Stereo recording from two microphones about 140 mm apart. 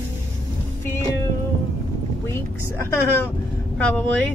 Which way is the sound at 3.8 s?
10° left (ahead or behind).